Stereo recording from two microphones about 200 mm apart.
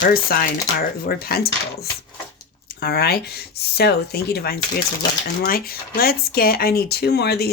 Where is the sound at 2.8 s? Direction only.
55° left (ahead or behind).